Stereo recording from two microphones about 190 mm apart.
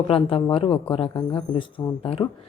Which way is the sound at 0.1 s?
30° left (ahead or behind).